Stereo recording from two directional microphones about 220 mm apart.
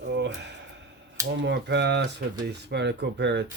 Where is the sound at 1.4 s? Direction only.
50° right (ahead or behind).